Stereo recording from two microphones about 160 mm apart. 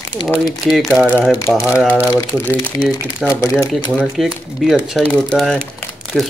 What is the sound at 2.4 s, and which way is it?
Speech, 10° left (ahead or behind).